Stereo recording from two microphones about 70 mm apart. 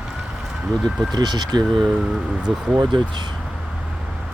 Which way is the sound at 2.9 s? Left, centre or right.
Right.